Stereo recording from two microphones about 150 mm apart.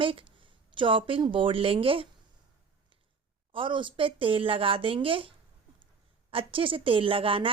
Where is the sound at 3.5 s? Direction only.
35° right (ahead or behind).